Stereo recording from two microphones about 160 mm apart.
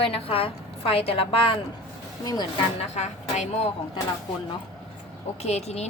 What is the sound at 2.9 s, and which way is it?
Speech, 45° left (ahead or behind).